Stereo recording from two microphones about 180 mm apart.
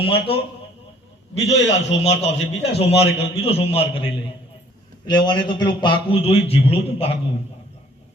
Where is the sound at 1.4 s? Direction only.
75° left (ahead or behind).